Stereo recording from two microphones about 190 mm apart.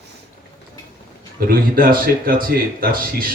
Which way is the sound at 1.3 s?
50° right (ahead or behind).